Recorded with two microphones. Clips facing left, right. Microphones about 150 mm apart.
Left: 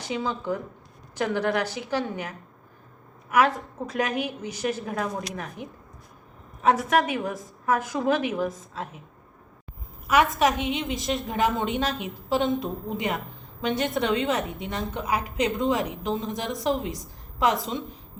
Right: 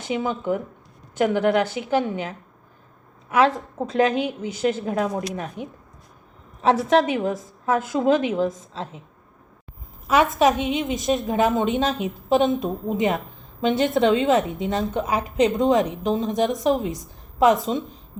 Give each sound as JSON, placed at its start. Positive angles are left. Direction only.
{"t": 0.0, "sound": "a woman's voice", "side_deg": -20}
{"t": 10.1, "sound": "a woman's voice", "side_deg": -25}